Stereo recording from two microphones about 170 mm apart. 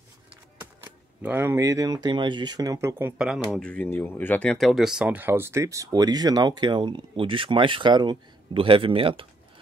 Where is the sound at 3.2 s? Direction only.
Centre (ahead or behind); by 9.2 s 30° right (ahead or behind).